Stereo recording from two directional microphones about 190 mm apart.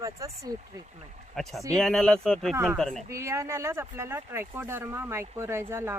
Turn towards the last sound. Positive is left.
turn(degrees=-10)  # may be behind; listen again after turning